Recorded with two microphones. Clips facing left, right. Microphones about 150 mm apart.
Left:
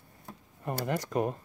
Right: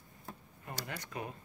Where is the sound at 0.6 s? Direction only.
50° left (ahead or behind).